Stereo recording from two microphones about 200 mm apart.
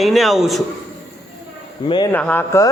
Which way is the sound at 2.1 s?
10° left (ahead or behind).